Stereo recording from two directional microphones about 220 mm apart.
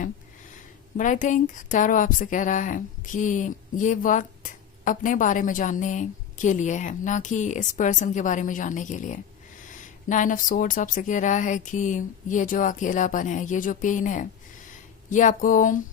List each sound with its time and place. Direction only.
0.9 s speech: 35° left (ahead or behind)